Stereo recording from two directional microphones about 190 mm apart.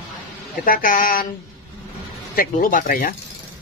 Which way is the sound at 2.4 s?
45° left (ahead or behind).